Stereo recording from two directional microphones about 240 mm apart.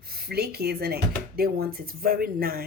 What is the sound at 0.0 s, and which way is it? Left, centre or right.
Speech, right.